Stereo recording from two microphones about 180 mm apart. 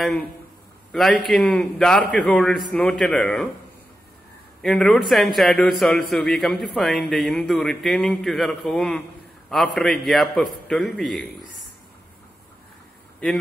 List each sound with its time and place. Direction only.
0.9 s a man's voice: centre (ahead or behind)
4.6 s a man's voice: 5° left (ahead or behind)